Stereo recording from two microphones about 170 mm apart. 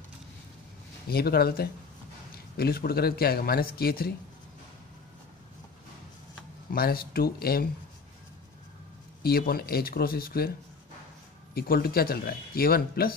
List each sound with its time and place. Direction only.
1.0 s speech: 65° left (ahead or behind)
6.7 s speech: 65° left (ahead or behind)
9.2 s speech: 65° left (ahead or behind)
11.5 s speech: 60° left (ahead or behind)